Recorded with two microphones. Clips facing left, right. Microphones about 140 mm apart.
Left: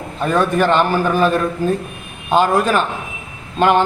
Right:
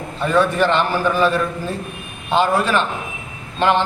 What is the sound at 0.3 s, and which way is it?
Speech, 45° left (ahead or behind).